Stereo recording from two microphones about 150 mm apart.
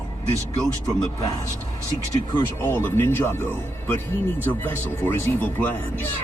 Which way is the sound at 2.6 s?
15° left (ahead or behind).